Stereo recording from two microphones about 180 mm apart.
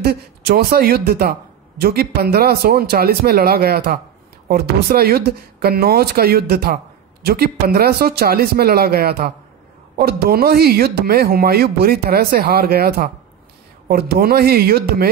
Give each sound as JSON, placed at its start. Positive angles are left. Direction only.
{"t": 0.0, "sound": "speech", "side_deg": -60}